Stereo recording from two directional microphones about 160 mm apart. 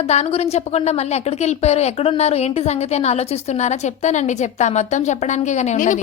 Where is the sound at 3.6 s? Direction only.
45° left (ahead or behind).